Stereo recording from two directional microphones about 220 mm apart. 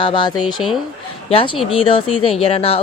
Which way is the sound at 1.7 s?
25° left (ahead or behind).